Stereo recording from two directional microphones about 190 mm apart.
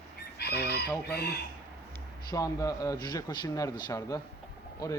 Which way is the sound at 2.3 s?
15° left (ahead or behind).